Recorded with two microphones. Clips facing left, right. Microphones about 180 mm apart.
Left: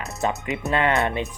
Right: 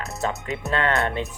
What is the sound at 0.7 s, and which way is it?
Music, 15° left (ahead or behind).